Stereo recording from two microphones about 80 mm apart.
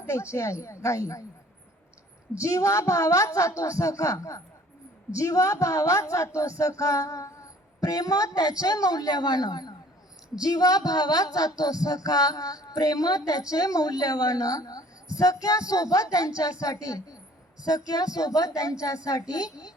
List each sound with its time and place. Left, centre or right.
0.0 s a woman's voice: left
2.4 s a woman's voice: left